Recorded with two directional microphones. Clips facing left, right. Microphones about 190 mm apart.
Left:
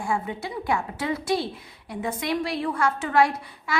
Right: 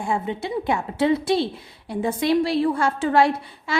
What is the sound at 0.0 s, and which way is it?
A woman's voice, 25° right (ahead or behind).